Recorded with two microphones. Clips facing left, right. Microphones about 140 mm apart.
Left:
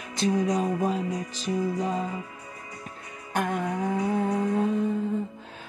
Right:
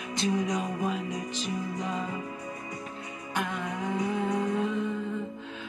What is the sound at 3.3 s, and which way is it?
Music, 50° left (ahead or behind).